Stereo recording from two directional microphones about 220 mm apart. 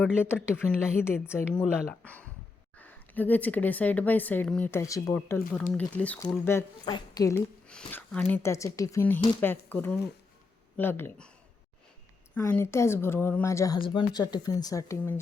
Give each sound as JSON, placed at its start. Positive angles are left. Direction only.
{"t": 0.0, "sound": "speech", "side_deg": -5}
{"t": 1.0, "sound": "speech", "side_deg": 10}
{"t": 2.7, "sound": "speech", "side_deg": 5}
{"t": 12.3, "sound": "speech", "side_deg": 10}